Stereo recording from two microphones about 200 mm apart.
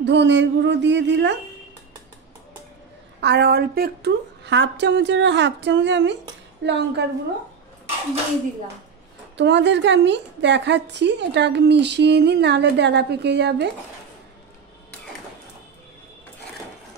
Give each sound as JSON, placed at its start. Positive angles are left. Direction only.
{"t": 0.0, "sound": "a woman's voice", "side_deg": -60}
{"t": 3.2, "sound": "a woman's voice", "side_deg": -55}
{"t": 9.4, "sound": "a woman's voice", "side_deg": -60}